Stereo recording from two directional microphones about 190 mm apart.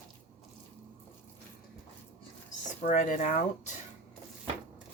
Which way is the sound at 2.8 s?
40° left (ahead or behind).